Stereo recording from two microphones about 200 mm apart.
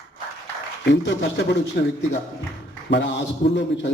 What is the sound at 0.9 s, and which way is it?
Speech, 55° left (ahead or behind).